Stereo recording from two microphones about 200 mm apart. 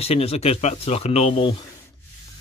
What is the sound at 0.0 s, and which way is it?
Speech, 30° left (ahead or behind).